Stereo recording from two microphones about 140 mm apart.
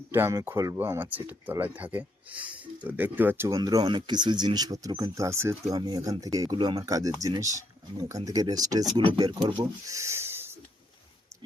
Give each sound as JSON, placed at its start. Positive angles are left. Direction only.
{"t": 0.1, "sound": "speech", "side_deg": -20}
{"t": 9.8, "sound": "pig", "side_deg": -20}